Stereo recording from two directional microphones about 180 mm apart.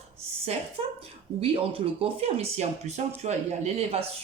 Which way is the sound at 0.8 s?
35° right (ahead or behind).